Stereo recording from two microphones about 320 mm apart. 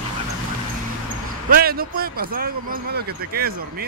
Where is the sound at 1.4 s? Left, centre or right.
Right.